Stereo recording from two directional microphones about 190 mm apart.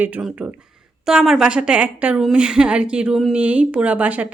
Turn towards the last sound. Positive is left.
turn(degrees=-10)  # may be behind; listen again after turning